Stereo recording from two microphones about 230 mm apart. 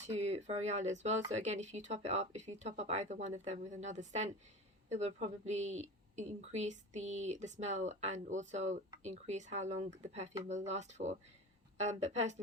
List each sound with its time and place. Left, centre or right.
0.1 s a woman's voice: right